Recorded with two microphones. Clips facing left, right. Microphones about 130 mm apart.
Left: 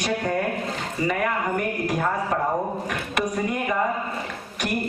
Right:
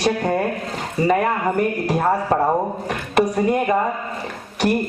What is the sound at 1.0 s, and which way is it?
Speech, 35° right (ahead or behind).